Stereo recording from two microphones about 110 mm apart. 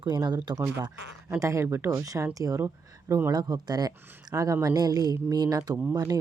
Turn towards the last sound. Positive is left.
turn(degrees=-30)  # may be behind; listen again after turning